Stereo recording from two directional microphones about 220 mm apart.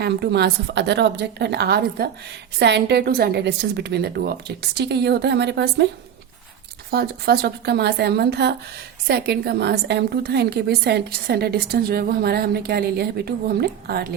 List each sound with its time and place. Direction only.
0.0 s a woman's voice: 50° right (ahead or behind)
6.9 s a woman's voice: 45° right (ahead or behind)